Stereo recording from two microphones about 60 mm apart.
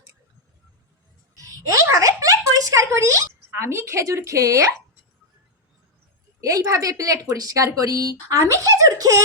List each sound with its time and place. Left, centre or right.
1.4 s a sound: right
6.4 s speech: right
8.4 s speech: right